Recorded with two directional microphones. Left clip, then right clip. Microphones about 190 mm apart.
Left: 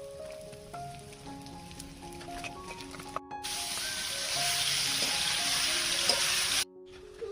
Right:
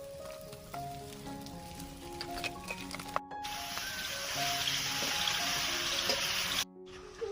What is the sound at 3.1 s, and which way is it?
Music, 50° right (ahead or behind).